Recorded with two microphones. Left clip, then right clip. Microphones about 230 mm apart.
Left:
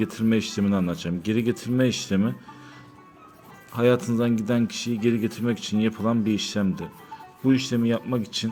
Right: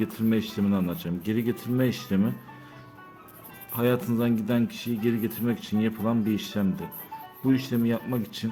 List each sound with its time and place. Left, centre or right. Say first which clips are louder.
0.0 s speech: left 3 dB; centre
3.8 s speech: left 4 dB; centre